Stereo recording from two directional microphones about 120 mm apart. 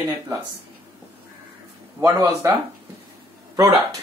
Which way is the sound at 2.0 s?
25° right (ahead or behind).